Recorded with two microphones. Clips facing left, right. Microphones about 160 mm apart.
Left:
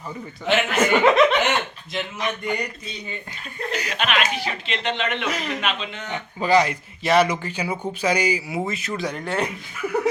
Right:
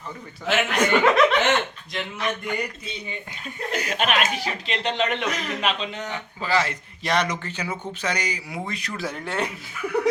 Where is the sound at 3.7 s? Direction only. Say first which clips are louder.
Right 1 dB; 50° right (ahead or behind).